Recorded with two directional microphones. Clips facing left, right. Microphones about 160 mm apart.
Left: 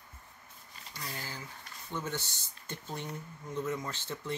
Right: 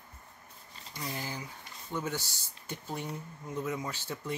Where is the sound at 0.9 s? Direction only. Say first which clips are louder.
Right 4 dB; 15° right (ahead or behind).